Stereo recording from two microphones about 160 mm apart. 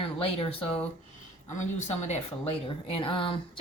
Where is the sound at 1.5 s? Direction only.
50° left (ahead or behind).